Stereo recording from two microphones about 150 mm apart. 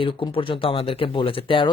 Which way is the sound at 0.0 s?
35° left (ahead or behind).